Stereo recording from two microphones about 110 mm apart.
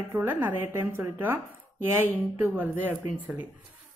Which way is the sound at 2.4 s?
20° right (ahead or behind).